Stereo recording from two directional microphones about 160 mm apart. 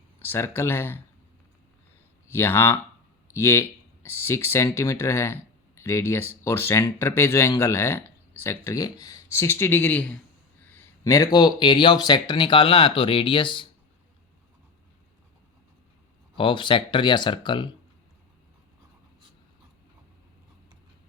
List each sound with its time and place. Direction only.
0.2 s speech: 15° left (ahead or behind)
2.3 s speech: 15° left (ahead or behind); by 13.7 s 30° left (ahead or behind)
16.3 s speech: 30° left (ahead or behind)